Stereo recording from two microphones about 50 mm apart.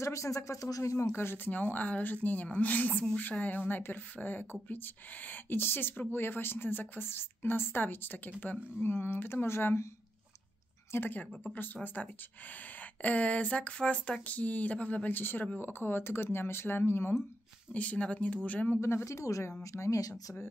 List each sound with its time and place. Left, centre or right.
0.0 s speech: left
1.1 s speech: left
8.7 s speech: left
10.9 s speech: left
17.7 s speech: left
18.8 s speech: left